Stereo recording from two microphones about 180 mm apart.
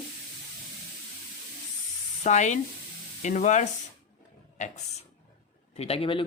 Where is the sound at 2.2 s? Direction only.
40° left (ahead or behind).